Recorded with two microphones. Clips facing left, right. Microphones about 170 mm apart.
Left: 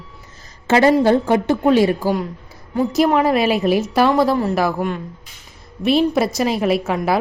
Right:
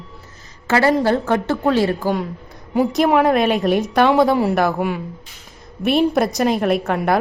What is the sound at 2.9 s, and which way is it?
A woman's voice, centre (ahead or behind).